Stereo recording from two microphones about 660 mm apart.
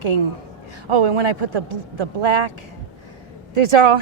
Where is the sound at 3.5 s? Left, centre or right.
Right.